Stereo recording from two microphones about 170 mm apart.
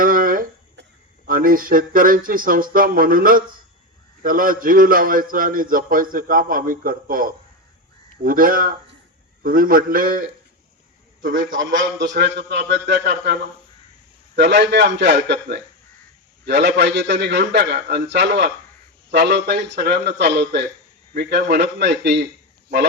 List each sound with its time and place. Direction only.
0.0 s a sound: 55° right (ahead or behind)
1.3 s a man's voice: 55° right (ahead or behind)
11.9 s speech: 85° right
14.3 s a man's voice: 90° right
21.1 s a man's voice: 80° right